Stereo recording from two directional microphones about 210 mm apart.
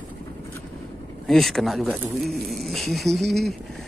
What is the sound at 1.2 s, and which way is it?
Speech, centre (ahead or behind).